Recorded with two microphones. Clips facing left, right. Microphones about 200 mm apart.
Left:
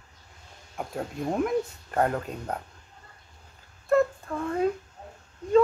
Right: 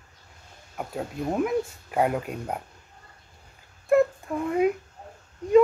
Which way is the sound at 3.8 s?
15° right (ahead or behind).